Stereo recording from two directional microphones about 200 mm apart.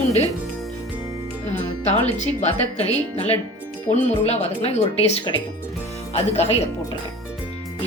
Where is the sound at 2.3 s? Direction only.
30° left (ahead or behind).